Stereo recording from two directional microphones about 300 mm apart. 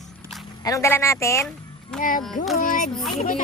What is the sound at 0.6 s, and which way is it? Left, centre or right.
Speech, centre.